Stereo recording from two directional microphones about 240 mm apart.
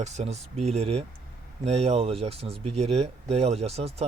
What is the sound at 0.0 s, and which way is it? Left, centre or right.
Speech, right.